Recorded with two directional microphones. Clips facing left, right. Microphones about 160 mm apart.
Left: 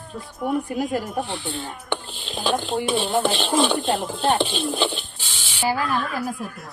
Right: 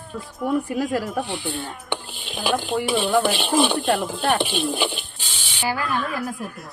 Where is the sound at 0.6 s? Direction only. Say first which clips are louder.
Right 1 dB; centre (ahead or behind).